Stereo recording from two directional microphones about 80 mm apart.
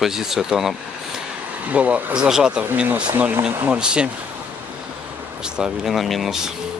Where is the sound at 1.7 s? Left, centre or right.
Centre.